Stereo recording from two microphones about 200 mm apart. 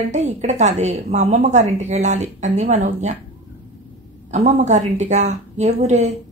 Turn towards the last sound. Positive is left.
turn(degrees=-35)  # may be behind; listen again after turning